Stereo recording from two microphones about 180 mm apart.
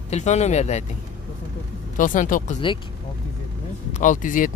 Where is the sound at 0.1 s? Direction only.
40° left (ahead or behind).